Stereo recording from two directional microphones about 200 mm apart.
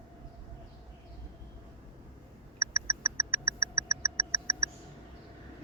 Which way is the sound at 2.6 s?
15° right (ahead or behind).